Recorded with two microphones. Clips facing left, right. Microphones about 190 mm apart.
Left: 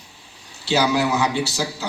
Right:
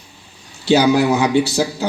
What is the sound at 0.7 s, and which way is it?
A man's voice, 55° right (ahead or behind).